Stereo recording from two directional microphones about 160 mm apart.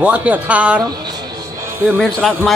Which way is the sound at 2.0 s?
Centre (ahead or behind).